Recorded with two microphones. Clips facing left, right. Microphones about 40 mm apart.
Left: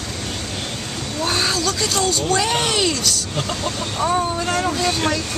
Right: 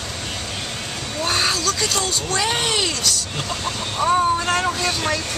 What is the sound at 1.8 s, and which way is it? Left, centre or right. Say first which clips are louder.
Speech: left 3 dB; centre.